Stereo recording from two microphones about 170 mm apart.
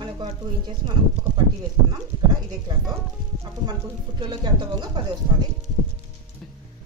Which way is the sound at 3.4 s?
25° right (ahead or behind).